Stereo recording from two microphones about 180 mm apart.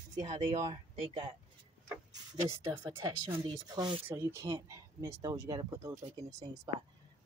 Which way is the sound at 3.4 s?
25° right (ahead or behind).